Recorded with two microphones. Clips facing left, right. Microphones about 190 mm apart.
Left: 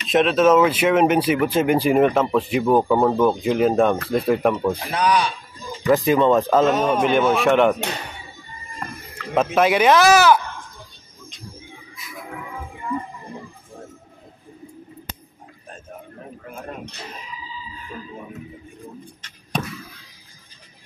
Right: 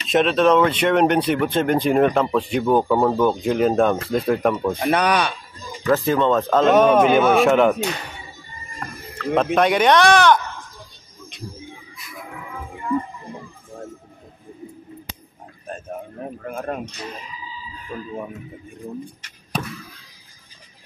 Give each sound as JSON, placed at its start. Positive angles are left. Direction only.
{"t": 0.1, "sound": "speech", "side_deg": 0}
{"t": 4.9, "sound": "speech", "side_deg": -60}
{"t": 5.9, "sound": "speech", "side_deg": 15}
{"t": 6.7, "sound": "a man's voice", "side_deg": -70}
{"t": 7.3, "sound": "speech", "side_deg": 0}
{"t": 9.2, "sound": "speech", "side_deg": 0}
{"t": 16.2, "sound": "a sound", "side_deg": -55}
{"t": 16.7, "sound": "speech", "side_deg": -55}
{"t": 19.5, "sound": "a sound", "side_deg": -5}